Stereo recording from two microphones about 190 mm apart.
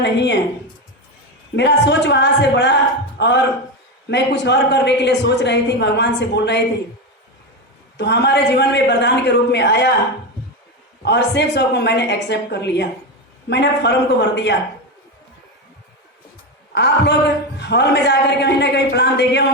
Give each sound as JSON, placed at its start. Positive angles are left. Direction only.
{"t": 0.0, "sound": "a man's voice", "side_deg": 65}
{"t": 1.5, "sound": "a man's voice", "side_deg": 65}
{"t": 7.9, "sound": "a man's voice", "side_deg": 60}
{"t": 11.0, "sound": "a man's voice", "side_deg": 60}
{"t": 16.7, "sound": "a man's voice", "side_deg": 60}